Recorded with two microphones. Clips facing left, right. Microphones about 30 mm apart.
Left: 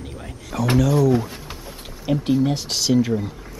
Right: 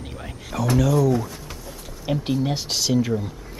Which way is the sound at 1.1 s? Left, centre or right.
Left.